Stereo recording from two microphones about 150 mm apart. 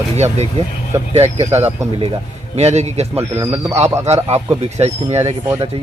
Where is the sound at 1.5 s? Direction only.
15° right (ahead or behind).